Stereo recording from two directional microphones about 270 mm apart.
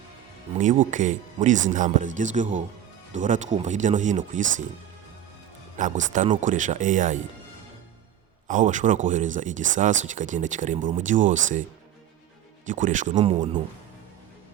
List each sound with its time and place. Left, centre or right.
0.6 s speech: right
5.8 s speech: right
8.4 s speech: right
12.6 s speech: right